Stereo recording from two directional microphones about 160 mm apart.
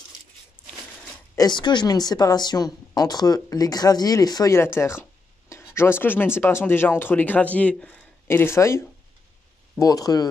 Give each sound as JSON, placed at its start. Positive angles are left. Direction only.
{"t": 1.3, "sound": "speech", "side_deg": 25}